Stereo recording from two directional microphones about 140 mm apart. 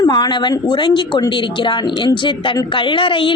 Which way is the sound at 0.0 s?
30° left (ahead or behind).